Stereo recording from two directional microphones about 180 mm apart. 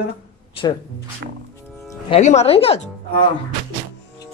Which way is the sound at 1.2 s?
65° right (ahead or behind).